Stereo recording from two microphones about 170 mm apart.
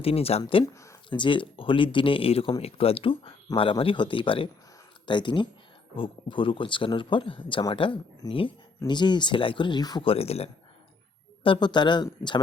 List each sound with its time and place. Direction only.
0.0 s speech: 35° left (ahead or behind)
0.6 s speech: 15° left (ahead or behind)
1.2 s speech: 30° left (ahead or behind)